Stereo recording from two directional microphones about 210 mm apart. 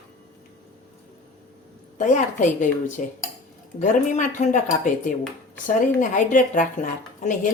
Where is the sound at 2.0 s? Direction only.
35° left (ahead or behind).